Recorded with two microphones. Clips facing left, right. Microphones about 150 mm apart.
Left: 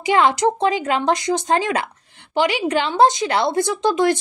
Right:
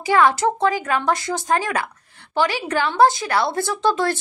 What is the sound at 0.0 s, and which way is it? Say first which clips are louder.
A woman's voice: left 1 dB; 20° left (ahead or behind).